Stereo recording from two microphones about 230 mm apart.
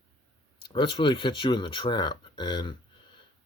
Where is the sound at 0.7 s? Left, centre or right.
Left.